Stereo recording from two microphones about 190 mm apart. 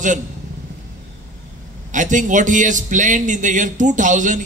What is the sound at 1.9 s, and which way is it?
A man's voice, 40° right (ahead or behind).